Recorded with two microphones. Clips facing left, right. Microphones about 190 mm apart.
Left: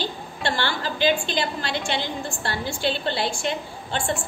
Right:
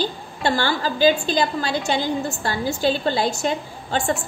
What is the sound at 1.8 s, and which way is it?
A woman's voice, 40° right (ahead or behind).